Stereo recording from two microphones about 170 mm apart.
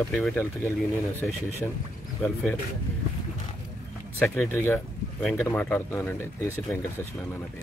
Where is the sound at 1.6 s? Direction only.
10° left (ahead or behind).